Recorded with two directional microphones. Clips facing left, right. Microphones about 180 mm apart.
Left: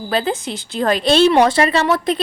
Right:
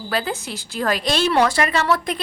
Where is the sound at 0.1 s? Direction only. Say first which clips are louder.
Left 5 dB; 25° left (ahead or behind).